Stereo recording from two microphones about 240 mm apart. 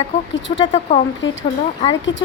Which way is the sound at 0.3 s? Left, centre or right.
Left.